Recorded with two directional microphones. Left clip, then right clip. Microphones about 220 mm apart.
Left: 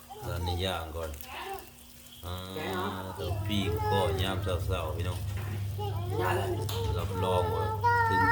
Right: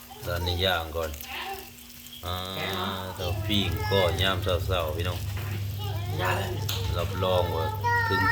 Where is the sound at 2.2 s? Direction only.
5° left (ahead or behind).